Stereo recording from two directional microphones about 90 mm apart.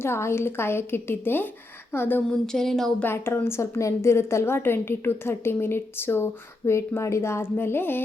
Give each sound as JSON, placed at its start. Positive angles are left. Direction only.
{"t": 0.0, "sound": "a woman's voice", "side_deg": 30}
{"t": 2.5, "sound": "speech", "side_deg": 5}
{"t": 3.0, "sound": "a woman's voice", "side_deg": 25}